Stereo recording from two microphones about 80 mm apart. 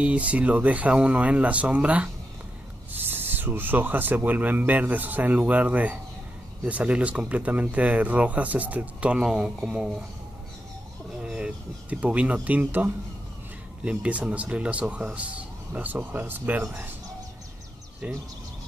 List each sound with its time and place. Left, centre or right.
0.0 s speech: centre
11.1 s speech: centre
18.0 s speech: centre